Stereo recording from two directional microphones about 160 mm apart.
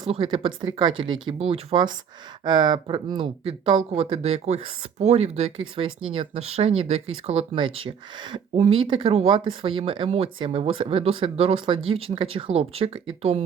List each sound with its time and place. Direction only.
0.0 s speech: 30° right (ahead or behind)